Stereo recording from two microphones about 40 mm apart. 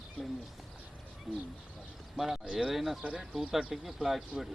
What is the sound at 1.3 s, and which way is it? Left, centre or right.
Speech, centre.